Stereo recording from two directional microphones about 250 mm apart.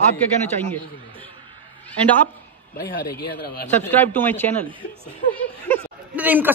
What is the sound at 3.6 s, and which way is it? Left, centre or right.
Speech, centre.